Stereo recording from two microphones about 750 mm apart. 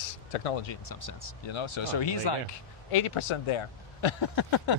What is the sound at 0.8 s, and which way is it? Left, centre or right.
Speech, left.